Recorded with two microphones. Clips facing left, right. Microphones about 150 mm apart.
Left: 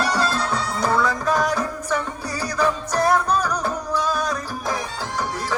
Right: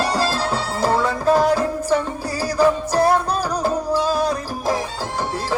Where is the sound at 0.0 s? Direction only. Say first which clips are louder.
Right 2 dB; 30° right (ahead or behind).